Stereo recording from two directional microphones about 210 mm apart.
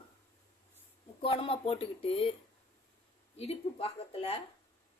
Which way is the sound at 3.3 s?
30° left (ahead or behind).